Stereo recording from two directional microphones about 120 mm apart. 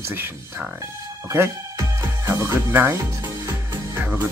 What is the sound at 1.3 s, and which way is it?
Speech, 25° right (ahead or behind).